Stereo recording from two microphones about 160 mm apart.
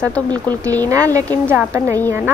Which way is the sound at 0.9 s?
20° right (ahead or behind).